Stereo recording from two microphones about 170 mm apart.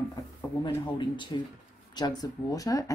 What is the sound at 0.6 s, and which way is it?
Speech, 25° left (ahead or behind).